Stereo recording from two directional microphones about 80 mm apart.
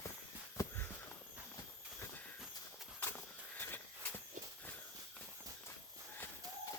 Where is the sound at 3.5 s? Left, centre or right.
Left.